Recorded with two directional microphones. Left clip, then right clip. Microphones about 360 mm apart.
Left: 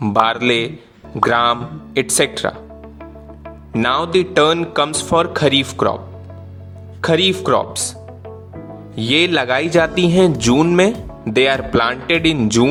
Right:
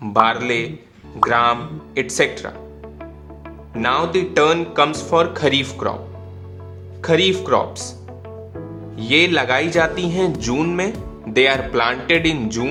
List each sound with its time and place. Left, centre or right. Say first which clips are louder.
0.0 s speech: left 1 dB; left
2.8 s music: left 1 dB; centre
3.8 s speech: left 2 dB; left
7.0 s speech: left 1 dB; left
9.0 s speech: even; centre